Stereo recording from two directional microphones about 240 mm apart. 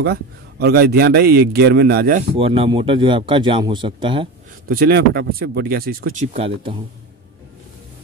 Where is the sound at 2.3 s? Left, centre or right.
Right.